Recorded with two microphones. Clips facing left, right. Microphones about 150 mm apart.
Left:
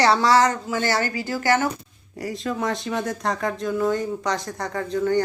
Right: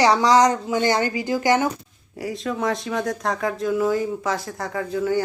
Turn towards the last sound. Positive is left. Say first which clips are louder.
# left 1 dB
turn(degrees=-5)  # may be behind; listen again after turning